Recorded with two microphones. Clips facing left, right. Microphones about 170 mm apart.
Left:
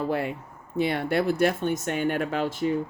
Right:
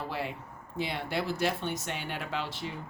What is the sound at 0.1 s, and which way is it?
Speech, 50° left (ahead or behind).